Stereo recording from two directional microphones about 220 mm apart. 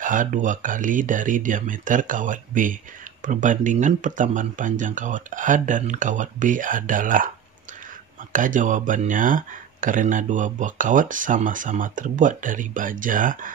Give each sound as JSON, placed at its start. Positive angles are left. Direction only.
{"t": 0.0, "sound": "speech", "side_deg": -35}
{"t": 8.3, "sound": "speech", "side_deg": -35}